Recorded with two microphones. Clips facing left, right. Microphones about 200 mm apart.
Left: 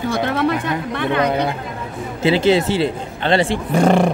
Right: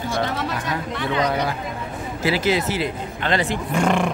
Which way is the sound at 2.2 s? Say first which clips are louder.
Left 6 dB; 25° left (ahead or behind).